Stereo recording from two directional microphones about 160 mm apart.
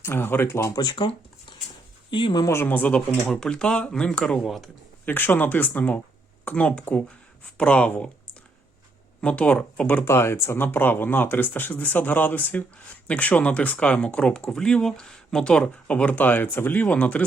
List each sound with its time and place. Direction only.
0.0 s speech: 15° left (ahead or behind)
5.0 s speech: 10° left (ahead or behind)
9.2 s speech: 10° left (ahead or behind)